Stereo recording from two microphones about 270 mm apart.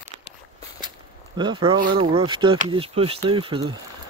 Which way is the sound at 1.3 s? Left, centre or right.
Centre.